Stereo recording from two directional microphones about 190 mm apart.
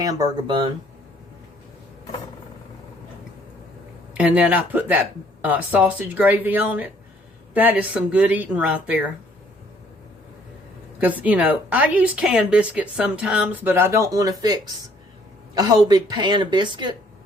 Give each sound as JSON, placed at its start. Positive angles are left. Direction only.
{"t": 0.0, "sound": "a woman's voice", "side_deg": -20}
{"t": 4.1, "sound": "speech", "side_deg": -5}
{"t": 11.0, "sound": "a woman's voice", "side_deg": -10}